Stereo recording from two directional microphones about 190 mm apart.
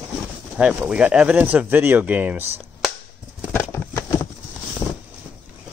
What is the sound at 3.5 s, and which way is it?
Horse, 15° left (ahead or behind).